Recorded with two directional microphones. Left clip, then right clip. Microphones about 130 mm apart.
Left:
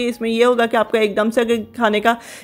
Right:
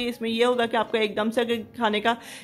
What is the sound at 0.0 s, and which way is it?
Speech, 30° left (ahead or behind).